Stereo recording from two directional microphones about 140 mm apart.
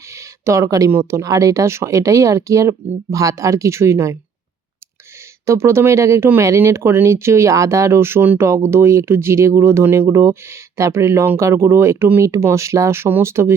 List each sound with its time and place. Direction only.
0.1 s speech: 20° right (ahead or behind)
5.5 s speech: 20° right (ahead or behind)